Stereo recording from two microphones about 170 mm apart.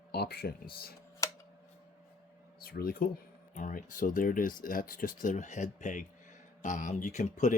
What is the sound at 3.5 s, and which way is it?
Speech, 50° left (ahead or behind).